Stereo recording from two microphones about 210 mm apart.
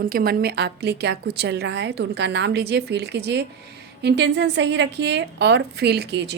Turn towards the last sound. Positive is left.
turn(degrees=-55)  # may be behind; listen again after turning